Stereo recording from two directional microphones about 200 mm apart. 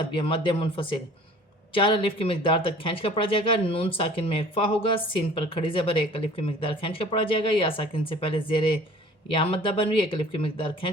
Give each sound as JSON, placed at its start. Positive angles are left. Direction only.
{"t": 0.0, "sound": "speech", "side_deg": 25}